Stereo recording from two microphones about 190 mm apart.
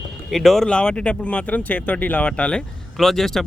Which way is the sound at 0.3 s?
Centre (ahead or behind).